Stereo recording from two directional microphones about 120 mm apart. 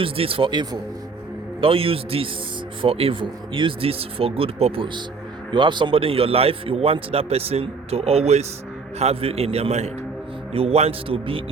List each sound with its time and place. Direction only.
0.0 s a man's voice: 50° right (ahead or behind)
1.6 s a man's voice: 50° right (ahead or behind)
5.5 s a man's voice: 40° right (ahead or behind)